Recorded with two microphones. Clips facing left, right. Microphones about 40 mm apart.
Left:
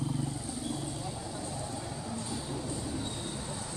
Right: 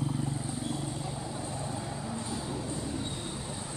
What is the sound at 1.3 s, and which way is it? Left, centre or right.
Vehicle, right.